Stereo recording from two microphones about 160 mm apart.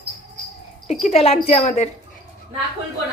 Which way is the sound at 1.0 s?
40° left (ahead or behind).